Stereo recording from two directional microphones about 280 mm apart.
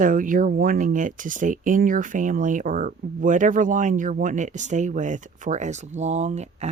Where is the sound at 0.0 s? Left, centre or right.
Right.